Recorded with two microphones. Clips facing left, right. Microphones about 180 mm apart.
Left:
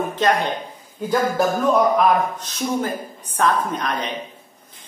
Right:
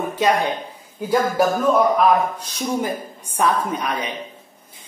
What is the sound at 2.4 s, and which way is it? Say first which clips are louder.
A man's voice: even; 10° right (ahead or behind).